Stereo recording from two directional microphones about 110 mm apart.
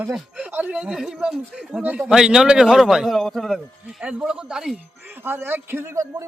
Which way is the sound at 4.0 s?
10° right (ahead or behind).